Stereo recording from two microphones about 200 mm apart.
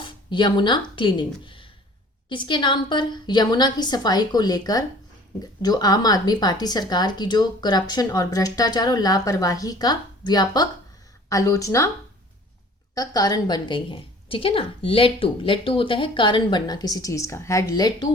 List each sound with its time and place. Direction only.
0.3 s a woman's voice: 25° left (ahead or behind)
12.9 s a woman's voice: 20° left (ahead or behind)